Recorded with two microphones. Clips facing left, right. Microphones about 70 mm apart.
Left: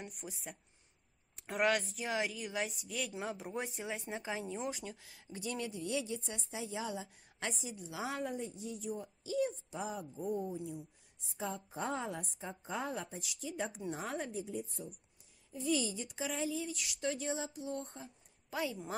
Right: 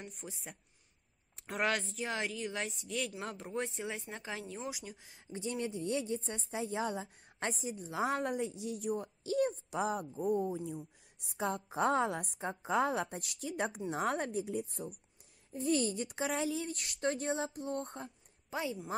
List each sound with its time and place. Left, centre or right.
0.0 s speech: centre
4.6 s speech: centre
5.0 s a woman's voice: right
8.3 s a woman's voice: right
10.5 s a woman's voice: right
15.5 s speech: right
16.7 s speech: right
18.5 s speech: right